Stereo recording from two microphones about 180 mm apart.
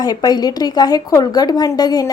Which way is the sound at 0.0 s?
20° left (ahead or behind).